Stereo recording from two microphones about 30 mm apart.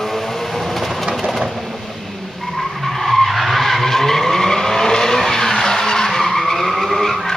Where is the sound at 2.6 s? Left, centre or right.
Centre.